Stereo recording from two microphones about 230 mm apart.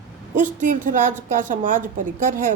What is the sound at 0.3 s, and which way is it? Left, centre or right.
A woman's voice, right.